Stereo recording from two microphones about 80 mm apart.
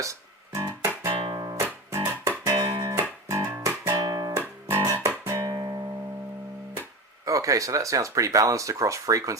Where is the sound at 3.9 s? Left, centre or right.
Right.